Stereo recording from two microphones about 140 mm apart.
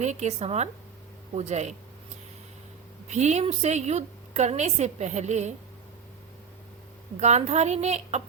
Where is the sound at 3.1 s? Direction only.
55° right (ahead or behind).